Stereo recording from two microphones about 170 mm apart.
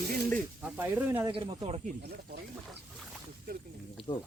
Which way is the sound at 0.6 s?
10° right (ahead or behind).